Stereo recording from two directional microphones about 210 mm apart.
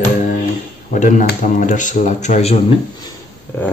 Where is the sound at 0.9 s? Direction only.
40° left (ahead or behind).